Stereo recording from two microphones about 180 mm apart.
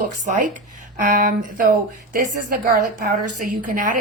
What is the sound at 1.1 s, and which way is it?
A woman's voice, 50° right (ahead or behind).